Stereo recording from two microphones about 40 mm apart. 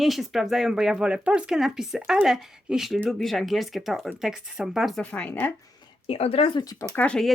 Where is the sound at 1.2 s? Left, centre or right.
Right.